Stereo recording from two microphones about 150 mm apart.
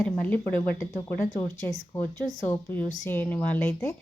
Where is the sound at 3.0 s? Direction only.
15° left (ahead or behind).